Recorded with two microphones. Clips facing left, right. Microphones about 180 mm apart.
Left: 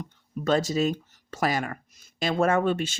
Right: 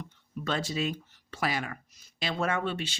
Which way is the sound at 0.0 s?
40° left (ahead or behind).